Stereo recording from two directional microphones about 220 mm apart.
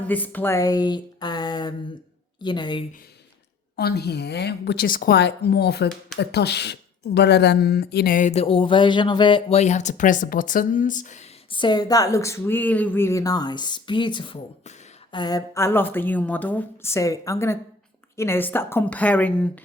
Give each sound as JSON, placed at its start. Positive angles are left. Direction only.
{"t": 0.1, "sound": "speech", "side_deg": 10}
{"t": 3.8, "sound": "a woman's voice", "side_deg": 45}
{"t": 11.5, "sound": "speech", "side_deg": 20}